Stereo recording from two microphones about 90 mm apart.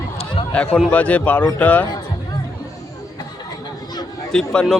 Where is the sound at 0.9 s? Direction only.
15° left (ahead or behind).